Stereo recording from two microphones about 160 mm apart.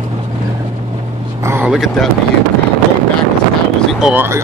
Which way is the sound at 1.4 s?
10° right (ahead or behind).